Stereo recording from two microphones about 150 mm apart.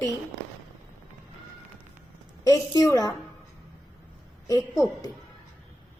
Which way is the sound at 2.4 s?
25° left (ahead or behind).